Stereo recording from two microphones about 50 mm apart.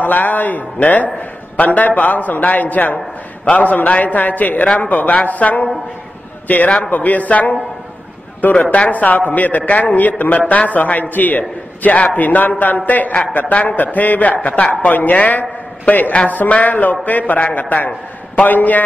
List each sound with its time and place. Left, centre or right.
0.0 s a man's voice: left